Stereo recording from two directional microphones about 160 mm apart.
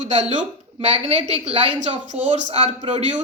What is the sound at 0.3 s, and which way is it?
A woman's voice, 40° right (ahead or behind).